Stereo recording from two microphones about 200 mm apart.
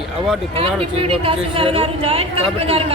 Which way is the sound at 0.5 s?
30° right (ahead or behind).